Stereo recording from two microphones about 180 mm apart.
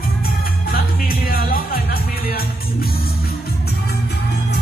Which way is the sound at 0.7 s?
55° left (ahead or behind).